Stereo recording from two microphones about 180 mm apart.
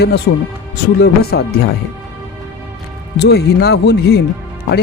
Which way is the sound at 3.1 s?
65° left (ahead or behind).